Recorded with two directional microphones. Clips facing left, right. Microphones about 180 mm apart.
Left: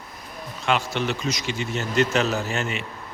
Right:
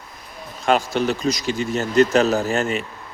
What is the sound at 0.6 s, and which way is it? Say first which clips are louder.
Speech: right 5 dB; 40° right (ahead or behind).